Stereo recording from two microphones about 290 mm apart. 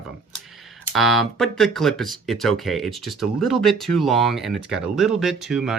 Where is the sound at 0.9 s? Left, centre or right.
Centre.